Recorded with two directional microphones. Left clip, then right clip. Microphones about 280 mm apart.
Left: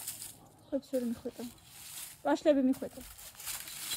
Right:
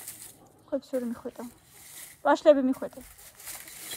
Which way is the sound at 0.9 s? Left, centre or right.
Right.